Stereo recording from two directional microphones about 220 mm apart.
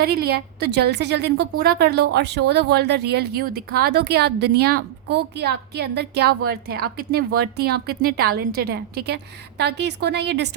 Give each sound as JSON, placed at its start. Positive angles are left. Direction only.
{"t": 0.0, "sound": "speech", "side_deg": -45}